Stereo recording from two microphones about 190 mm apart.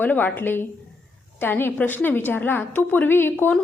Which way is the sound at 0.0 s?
10° left (ahead or behind).